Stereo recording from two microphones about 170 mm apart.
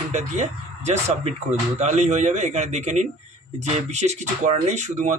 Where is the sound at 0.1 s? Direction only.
40° right (ahead or behind).